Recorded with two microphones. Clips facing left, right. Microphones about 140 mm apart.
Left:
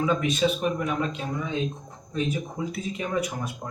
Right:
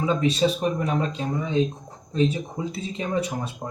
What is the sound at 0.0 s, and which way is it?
Speech, 30° right (ahead or behind).